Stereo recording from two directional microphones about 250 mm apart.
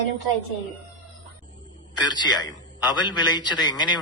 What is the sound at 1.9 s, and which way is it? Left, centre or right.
A man's voice, centre.